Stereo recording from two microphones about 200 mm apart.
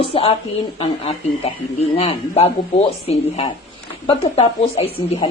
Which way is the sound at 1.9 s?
30° left (ahead or behind).